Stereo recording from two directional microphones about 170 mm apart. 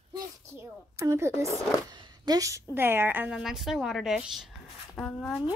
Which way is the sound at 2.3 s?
20° right (ahead or behind).